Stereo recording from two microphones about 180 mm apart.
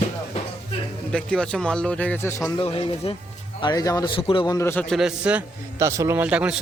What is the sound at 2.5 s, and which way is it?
A man's voice, 30° left (ahead or behind).